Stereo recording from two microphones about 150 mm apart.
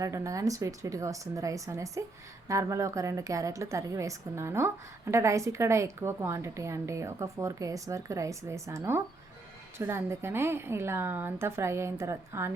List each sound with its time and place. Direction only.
0.0 s a woman's voice: 20° right (ahead or behind)